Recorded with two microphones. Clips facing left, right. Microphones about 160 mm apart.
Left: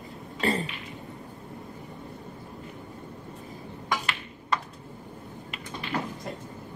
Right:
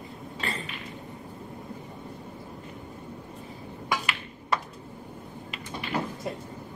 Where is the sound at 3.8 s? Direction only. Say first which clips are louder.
Even; 10° right (ahead or behind).